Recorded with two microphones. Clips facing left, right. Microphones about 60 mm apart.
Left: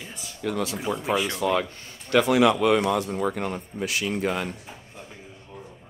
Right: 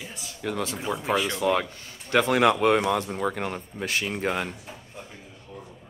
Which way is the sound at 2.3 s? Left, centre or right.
Right.